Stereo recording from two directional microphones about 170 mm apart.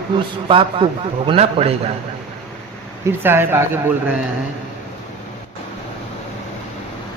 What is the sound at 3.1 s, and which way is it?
Speech, 10° right (ahead or behind).